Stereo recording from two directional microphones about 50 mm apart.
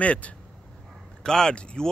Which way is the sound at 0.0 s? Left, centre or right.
Left.